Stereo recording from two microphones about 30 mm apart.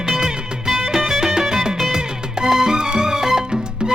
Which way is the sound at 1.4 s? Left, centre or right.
Centre.